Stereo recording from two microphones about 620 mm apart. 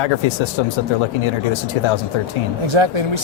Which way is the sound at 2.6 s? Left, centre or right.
Right.